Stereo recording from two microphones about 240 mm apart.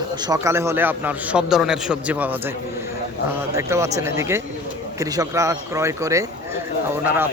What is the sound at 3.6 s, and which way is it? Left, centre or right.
A man's voice, centre.